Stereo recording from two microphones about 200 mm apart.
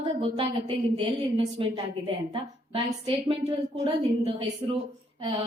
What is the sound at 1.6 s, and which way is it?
A woman's voice, 25° right (ahead or behind).